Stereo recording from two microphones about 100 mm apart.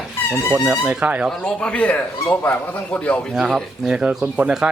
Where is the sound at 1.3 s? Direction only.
10° left (ahead or behind).